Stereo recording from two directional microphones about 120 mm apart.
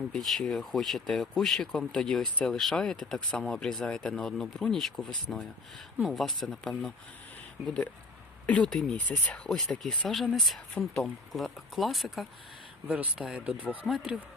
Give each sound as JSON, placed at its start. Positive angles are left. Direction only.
{"t": 0.1, "sound": "speech", "side_deg": 5}
{"t": 8.4, "sound": "speech", "side_deg": 10}